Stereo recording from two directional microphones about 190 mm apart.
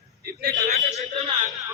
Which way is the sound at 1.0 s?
35° right (ahead or behind).